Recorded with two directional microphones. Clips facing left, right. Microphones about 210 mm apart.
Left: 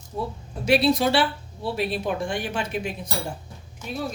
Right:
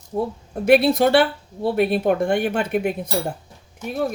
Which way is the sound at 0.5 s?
55° right (ahead or behind).